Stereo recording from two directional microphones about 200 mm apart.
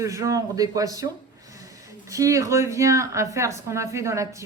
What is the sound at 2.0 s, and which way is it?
A man's voice, 15° right (ahead or behind).